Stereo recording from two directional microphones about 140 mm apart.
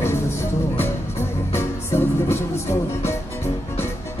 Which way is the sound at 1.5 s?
15° left (ahead or behind).